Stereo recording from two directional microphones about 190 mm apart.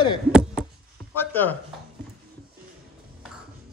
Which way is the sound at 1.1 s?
10° left (ahead or behind).